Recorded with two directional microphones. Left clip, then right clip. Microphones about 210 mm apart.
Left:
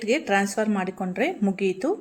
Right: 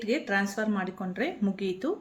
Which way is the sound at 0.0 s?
25° left (ahead or behind).